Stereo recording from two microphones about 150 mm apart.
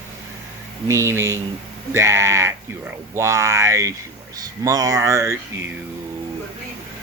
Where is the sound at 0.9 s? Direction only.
20° right (ahead or behind).